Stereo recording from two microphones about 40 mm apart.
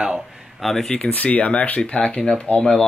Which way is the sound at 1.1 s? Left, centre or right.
Left.